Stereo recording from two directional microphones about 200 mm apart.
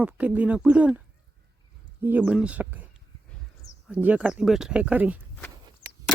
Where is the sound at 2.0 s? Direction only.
10° right (ahead or behind).